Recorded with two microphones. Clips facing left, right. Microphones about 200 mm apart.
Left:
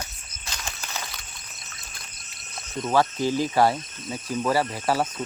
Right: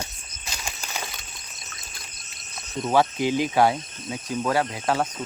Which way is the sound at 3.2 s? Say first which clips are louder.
Right 1 dB; 20° right (ahead or behind).